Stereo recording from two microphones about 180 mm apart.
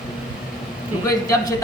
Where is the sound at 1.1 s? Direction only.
20° left (ahead or behind).